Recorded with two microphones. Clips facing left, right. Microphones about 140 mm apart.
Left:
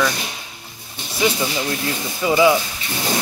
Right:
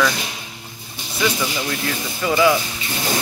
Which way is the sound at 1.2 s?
25° left (ahead or behind).